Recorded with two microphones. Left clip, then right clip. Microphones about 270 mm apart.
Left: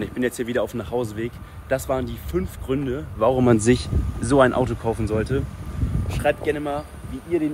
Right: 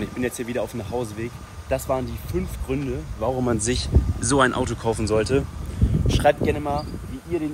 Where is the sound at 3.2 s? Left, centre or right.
Left.